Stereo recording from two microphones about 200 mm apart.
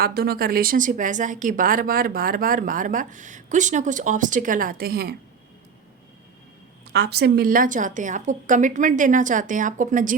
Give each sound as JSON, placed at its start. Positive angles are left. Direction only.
{"t": 0.0, "sound": "a woman's voice", "side_deg": -50}
{"t": 6.9, "sound": "a woman's voice", "side_deg": -55}